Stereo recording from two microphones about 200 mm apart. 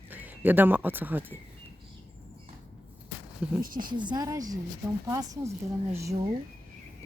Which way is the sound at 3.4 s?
5° right (ahead or behind).